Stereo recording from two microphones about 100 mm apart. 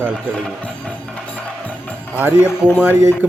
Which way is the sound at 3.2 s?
15° right (ahead or behind).